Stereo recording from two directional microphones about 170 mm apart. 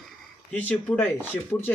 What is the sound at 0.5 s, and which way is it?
Speech, 10° left (ahead or behind).